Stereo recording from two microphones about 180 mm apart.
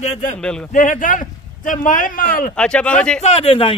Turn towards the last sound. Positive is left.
turn(degrees=30)  # may be behind; listen again after turning